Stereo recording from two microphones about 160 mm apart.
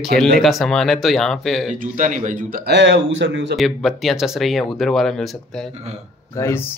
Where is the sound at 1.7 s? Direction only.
55° right (ahead or behind); by 3.5 s 90° right.